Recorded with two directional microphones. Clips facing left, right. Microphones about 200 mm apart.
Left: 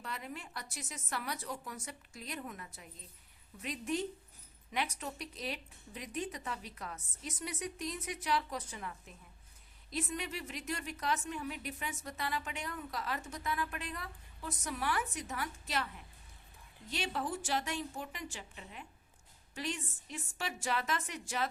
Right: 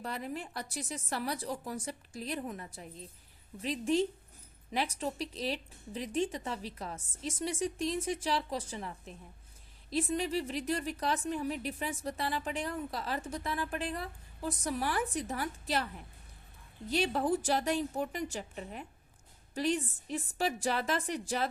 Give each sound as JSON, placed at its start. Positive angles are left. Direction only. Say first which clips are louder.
{"t": 0.0, "sound": "a woman's voice", "louder": "right 6 dB", "side_deg": -35}